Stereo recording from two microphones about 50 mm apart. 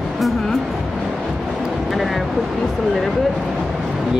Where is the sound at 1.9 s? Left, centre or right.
Centre.